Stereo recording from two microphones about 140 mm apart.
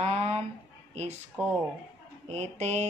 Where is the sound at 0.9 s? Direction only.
50° right (ahead or behind).